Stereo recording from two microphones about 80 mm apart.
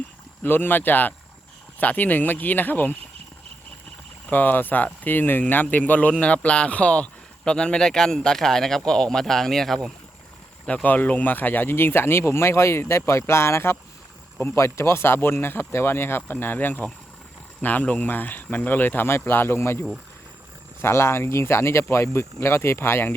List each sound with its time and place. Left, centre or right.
0.4 s speech: left
4.3 s speech: left; by 9.9 s centre
10.8 s speech: centre
20.8 s speech: left